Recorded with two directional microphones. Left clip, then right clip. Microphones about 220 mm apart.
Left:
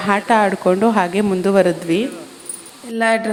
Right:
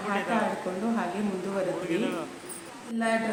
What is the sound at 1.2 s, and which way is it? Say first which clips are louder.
Speech: left 14 dB; 45° left (ahead or behind).